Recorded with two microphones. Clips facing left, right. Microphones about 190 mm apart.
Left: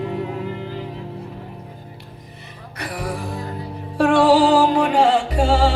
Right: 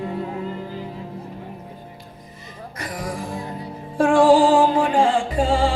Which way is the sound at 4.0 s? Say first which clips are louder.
Even; 70° left (ahead or behind).